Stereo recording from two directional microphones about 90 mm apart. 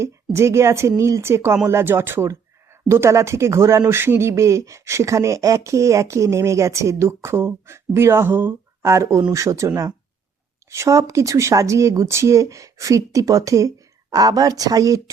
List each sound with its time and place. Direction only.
0.0 s speech: 30° right (ahead or behind)